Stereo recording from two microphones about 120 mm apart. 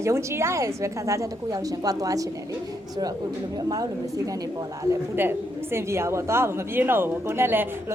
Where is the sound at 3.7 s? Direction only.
30° right (ahead or behind).